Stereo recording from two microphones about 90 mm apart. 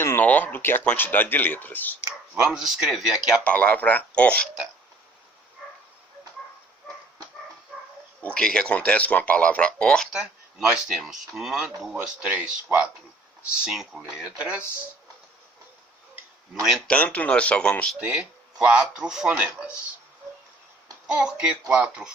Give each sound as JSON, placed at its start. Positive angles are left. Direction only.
{"t": 0.2, "sound": "speech", "side_deg": 20}
{"t": 2.3, "sound": "speech", "side_deg": -5}
{"t": 3.4, "sound": "speech", "side_deg": 15}
{"t": 8.2, "sound": "speech", "side_deg": 10}
{"t": 10.1, "sound": "speech", "side_deg": -10}
{"t": 16.6, "sound": "speech", "side_deg": 5}
{"t": 18.0, "sound": "speech", "side_deg": -10}
{"t": 21.1, "sound": "speech", "side_deg": -10}